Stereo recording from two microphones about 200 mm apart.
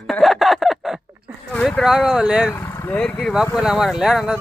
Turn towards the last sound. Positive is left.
turn(degrees=0)  # may be behind; listen again after turning